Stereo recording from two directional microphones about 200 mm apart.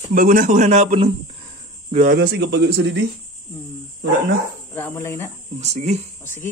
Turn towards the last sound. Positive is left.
turn(degrees=10)  # may be behind; listen again after turning